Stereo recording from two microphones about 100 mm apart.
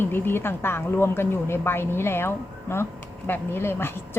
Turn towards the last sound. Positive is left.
turn(degrees=25)  # may be behind; listen again after turning